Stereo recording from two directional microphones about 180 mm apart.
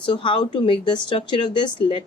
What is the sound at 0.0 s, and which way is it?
Speech, 25° left (ahead or behind).